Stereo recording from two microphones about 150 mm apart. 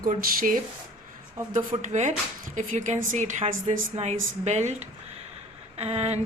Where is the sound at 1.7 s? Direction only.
50° right (ahead or behind).